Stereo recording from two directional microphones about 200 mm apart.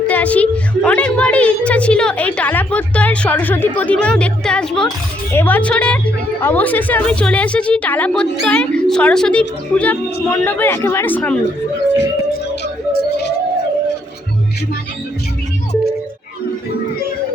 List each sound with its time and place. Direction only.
0.1 s a woman's voice: 5° left (ahead or behind)